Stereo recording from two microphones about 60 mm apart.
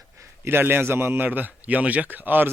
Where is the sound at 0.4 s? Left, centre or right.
Right.